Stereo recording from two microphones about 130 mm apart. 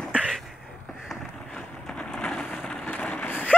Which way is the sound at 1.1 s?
5° left (ahead or behind).